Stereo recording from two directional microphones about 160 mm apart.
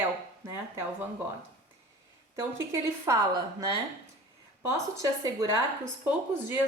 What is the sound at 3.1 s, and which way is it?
Speech, 20° right (ahead or behind).